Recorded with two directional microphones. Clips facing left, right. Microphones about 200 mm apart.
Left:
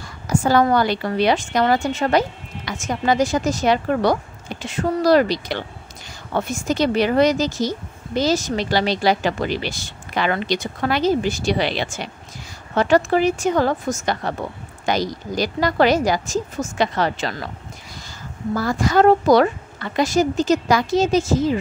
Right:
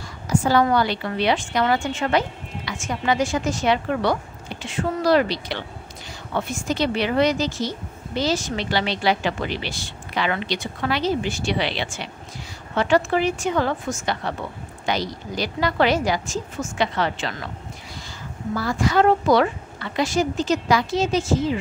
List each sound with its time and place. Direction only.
0.3 s a woman's voice: 45° left (ahead or behind)
18.5 s a woman's voice: 40° left (ahead or behind)